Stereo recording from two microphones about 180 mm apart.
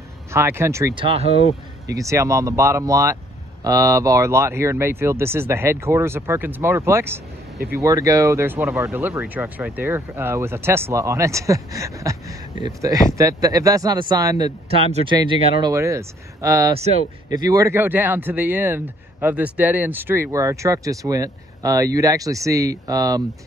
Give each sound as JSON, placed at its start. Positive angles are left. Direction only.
{"t": 0.3, "sound": "speech", "side_deg": -15}
{"t": 0.9, "sound": "speech", "side_deg": -30}
{"t": 1.9, "sound": "speech", "side_deg": -15}
{"t": 14.7, "sound": "speech", "side_deg": -35}
{"t": 15.6, "sound": "speech", "side_deg": -15}